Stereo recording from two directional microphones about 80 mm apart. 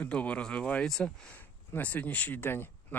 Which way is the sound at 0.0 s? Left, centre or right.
Centre.